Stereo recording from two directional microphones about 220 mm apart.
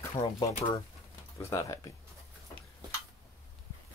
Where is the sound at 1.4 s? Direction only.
15° left (ahead or behind).